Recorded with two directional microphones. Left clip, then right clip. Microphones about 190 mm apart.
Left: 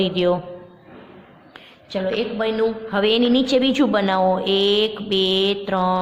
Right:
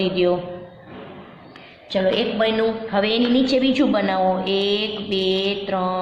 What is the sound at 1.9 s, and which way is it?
Speech, 25° left (ahead or behind).